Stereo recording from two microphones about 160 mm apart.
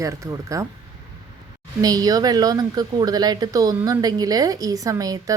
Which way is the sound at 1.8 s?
25° right (ahead or behind).